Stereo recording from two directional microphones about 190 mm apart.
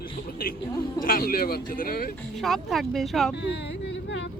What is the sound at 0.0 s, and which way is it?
Music, 50° left (ahead or behind).